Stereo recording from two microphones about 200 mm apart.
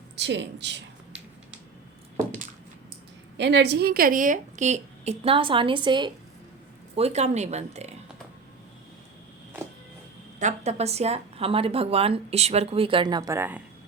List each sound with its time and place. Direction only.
0.2 s a woman's voice: 60° right (ahead or behind)
3.3 s a woman's voice: 60° right (ahead or behind); by 7.9 s 35° right (ahead or behind)
10.4 s a woman's voice: 35° right (ahead or behind); by 13.6 s 10° right (ahead or behind)